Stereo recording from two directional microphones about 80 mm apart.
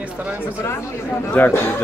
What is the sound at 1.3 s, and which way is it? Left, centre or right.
Speech, left.